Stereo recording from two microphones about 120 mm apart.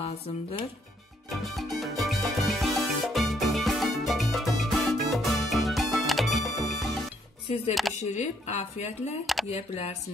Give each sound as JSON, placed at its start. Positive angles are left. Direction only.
{"t": 0.0, "sound": "speech", "side_deg": 55}
{"t": 1.3, "sound": "music", "side_deg": 0}
{"t": 7.4, "sound": "speech", "side_deg": 55}
{"t": 7.9, "sound": "speech", "side_deg": 70}
{"t": 9.2, "sound": "speech", "side_deg": 0}
{"t": 9.5, "sound": "speech", "side_deg": 60}